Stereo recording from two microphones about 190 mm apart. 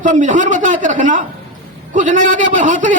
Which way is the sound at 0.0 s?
40° right (ahead or behind).